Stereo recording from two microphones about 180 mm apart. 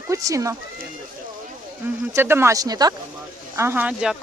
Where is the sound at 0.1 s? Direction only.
15° right (ahead or behind).